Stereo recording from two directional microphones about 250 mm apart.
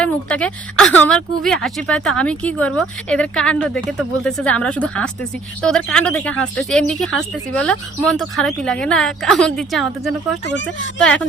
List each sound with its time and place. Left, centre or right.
0.0 s speech: centre
10.4 s speech: left
11.0 s speech: centre